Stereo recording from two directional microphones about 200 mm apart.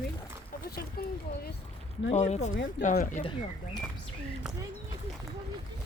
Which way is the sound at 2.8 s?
60° left (ahead or behind).